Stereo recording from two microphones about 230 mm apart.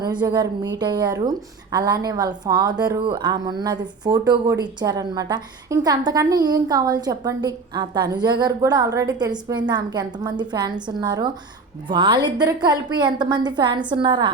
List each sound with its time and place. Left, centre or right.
0.0 s a woman's voice: centre